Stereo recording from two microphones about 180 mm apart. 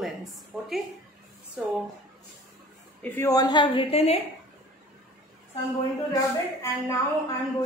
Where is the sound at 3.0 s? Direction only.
15° left (ahead or behind); by 4.2 s 35° left (ahead or behind).